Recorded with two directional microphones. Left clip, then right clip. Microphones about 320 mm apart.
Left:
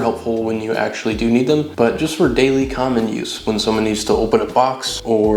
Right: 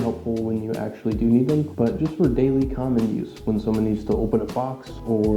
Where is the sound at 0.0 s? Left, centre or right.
Centre.